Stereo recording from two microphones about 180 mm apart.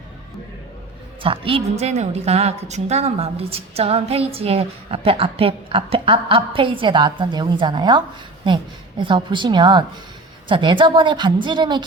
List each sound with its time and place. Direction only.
1.2 s a woman's voice: 30° right (ahead or behind)